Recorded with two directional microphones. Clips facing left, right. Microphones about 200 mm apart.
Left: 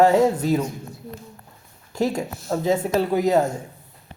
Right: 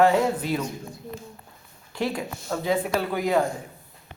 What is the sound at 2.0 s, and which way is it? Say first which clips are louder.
A man's voice: left 5 dB; 45° left (ahead or behind).